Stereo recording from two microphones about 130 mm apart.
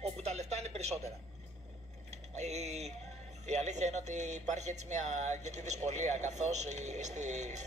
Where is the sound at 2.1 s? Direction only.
60° right (ahead or behind).